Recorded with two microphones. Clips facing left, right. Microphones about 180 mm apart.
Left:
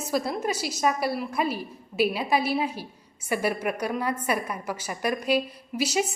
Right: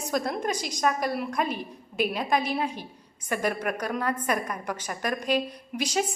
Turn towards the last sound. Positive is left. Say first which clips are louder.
# left 2 dB
turn(degrees=5)  # may be behind; listen again after turning